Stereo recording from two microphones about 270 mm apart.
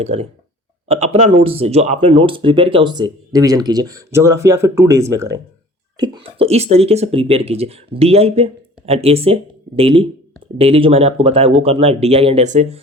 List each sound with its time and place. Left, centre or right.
0.0 s speech: right
6.0 s speech: right